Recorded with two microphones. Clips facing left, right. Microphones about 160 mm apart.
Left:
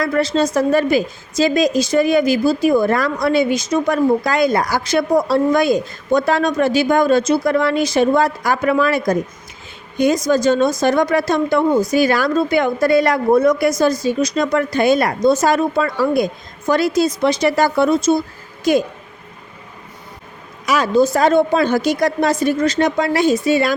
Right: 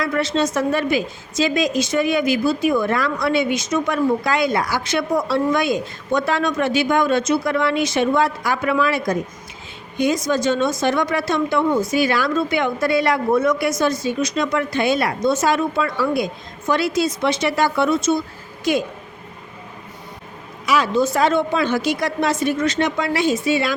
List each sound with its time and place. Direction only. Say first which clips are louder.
0.0 s a woman's voice: left 3 dB; 35° left (ahead or behind)
20.7 s a woman's voice: left 3 dB; 45° left (ahead or behind)